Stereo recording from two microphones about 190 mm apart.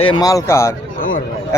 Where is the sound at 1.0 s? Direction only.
50° left (ahead or behind).